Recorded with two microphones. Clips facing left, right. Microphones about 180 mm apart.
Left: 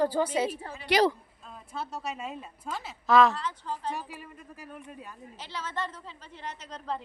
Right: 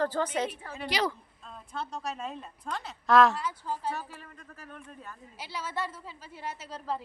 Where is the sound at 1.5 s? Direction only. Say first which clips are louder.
Even; 5° left (ahead or behind); by 3.9 s 10° right (ahead or behind).